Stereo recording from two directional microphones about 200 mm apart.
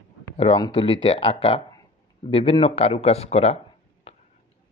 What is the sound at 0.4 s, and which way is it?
Speech, 30° left (ahead or behind).